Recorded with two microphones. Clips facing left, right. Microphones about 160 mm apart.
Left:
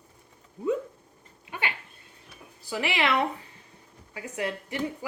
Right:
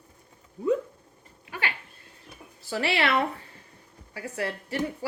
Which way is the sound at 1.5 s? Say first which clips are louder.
Even; 20° left (ahead or behind).